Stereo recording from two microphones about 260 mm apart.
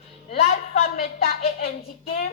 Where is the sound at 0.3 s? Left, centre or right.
Left.